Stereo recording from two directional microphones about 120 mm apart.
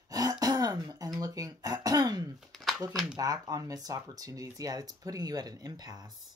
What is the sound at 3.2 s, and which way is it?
Speech, 30° right (ahead or behind).